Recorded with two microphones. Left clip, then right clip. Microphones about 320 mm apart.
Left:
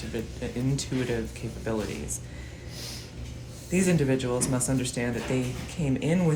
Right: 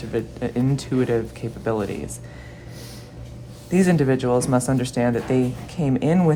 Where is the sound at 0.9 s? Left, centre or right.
Right.